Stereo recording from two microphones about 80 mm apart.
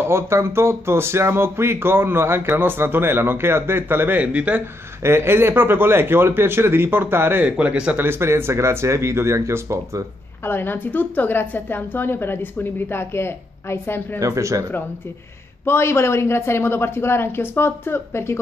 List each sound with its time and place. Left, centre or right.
0.0 s speech: right
4.2 s speech: centre
5.0 s speech: right
7.4 s speech: centre
8.0 s speech: right
10.4 s a woman's voice: left
14.2 s speech: right
15.6 s a woman's voice: left